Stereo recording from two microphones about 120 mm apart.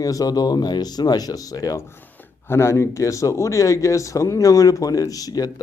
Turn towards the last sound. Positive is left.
turn(degrees=30)  # may be behind; listen again after turning